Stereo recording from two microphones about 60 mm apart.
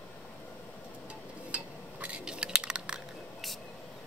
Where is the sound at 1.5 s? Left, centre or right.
Right.